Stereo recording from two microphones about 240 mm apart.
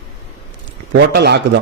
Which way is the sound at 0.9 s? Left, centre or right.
Right.